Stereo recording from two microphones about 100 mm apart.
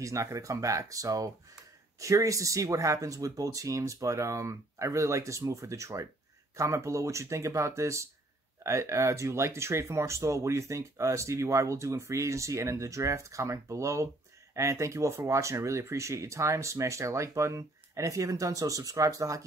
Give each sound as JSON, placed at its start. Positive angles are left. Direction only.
{"t": 0.0, "sound": "speech", "side_deg": -30}